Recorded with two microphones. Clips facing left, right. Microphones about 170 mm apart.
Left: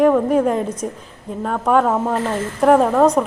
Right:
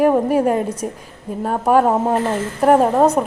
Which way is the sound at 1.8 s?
25° right (ahead or behind).